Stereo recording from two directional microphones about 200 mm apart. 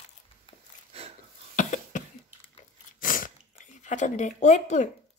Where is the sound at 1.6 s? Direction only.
40° left (ahead or behind).